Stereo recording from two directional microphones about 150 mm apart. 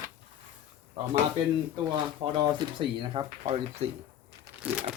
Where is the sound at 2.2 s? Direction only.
35° right (ahead or behind).